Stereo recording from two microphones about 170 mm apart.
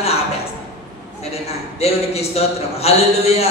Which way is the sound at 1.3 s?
35° left (ahead or behind).